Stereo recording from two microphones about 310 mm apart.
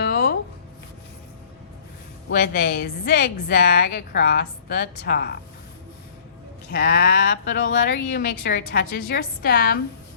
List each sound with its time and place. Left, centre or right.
0.0 s a sound: left
2.3 s speech: left
6.7 s speech: left